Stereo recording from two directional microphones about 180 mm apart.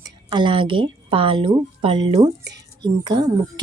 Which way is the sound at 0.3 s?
25° right (ahead or behind).